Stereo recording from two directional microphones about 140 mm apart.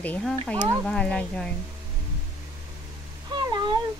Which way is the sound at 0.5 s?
20° right (ahead or behind).